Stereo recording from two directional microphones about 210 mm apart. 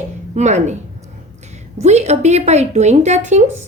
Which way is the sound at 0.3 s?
35° right (ahead or behind).